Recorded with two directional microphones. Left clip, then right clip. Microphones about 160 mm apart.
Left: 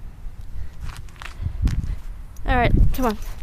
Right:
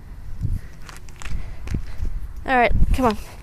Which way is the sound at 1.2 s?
40° right (ahead or behind).